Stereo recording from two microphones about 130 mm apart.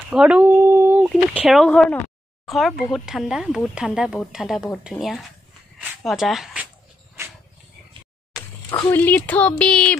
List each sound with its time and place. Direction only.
0.1 s speech: 5° right (ahead or behind)
0.7 s a sound: 15° right (ahead or behind)
1.0 s speech: 5° right (ahead or behind)
1.6 s speech: 5° left (ahead or behind)
8.6 s speech: 35° left (ahead or behind)
8.9 s speech: 15° left (ahead or behind)